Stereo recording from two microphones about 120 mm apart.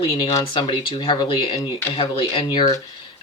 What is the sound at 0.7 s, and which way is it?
Speech, 45° left (ahead or behind).